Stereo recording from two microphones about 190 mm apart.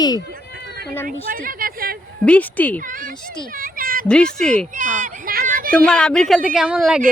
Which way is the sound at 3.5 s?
50° right (ahead or behind).